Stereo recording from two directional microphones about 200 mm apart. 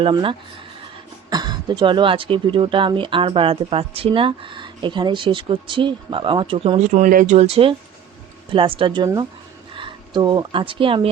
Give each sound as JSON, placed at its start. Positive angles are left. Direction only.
{"t": 0.0, "sound": "speech", "side_deg": -25}